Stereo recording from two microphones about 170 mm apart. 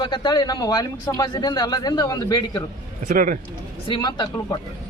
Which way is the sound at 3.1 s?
55° right (ahead or behind).